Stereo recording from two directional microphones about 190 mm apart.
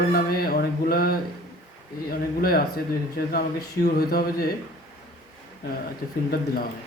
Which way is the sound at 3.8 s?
55° left (ahead or behind).